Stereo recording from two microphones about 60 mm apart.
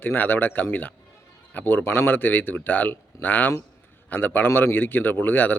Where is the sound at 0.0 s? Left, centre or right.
Left.